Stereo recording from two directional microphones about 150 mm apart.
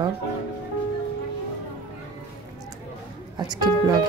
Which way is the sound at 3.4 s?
25° right (ahead or behind).